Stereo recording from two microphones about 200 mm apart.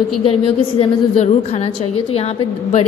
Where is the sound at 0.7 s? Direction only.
30° left (ahead or behind).